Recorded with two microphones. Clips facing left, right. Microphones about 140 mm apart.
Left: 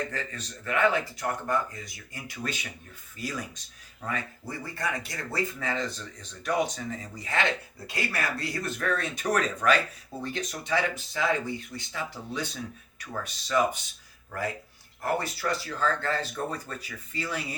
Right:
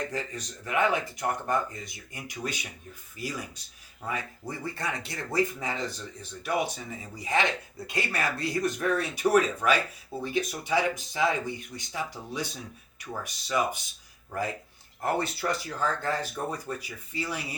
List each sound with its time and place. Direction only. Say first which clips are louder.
0.1 s speech: right 2 dB; 15° right (ahead or behind)
15.0 s speech: right 1 dB; 20° right (ahead or behind)